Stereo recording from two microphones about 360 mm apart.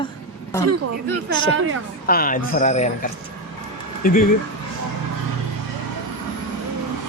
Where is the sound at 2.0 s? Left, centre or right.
Left.